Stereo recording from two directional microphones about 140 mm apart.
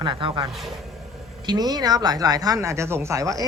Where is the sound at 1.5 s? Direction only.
30° right (ahead or behind).